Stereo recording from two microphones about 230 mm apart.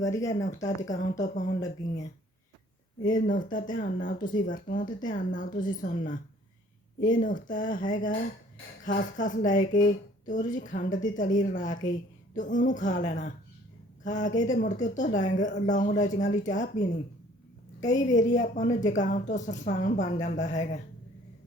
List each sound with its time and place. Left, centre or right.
0.0 s speech: centre
0.3 s speech: left
0.8 s speech: centre
1.2 s speech: left
1.5 s speech: centre
3.1 s speech: left
17.8 s speech: left